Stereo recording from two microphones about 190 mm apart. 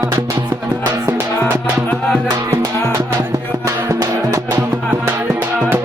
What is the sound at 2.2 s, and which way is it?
Music, 20° right (ahead or behind).